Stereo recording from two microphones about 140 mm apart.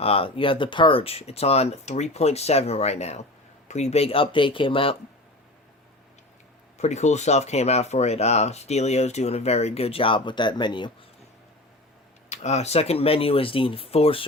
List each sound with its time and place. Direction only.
0.0 s speech: 40° left (ahead or behind)
6.7 s speech: 55° left (ahead or behind); by 10.9 s 35° left (ahead or behind)
12.3 s speech: 55° left (ahead or behind)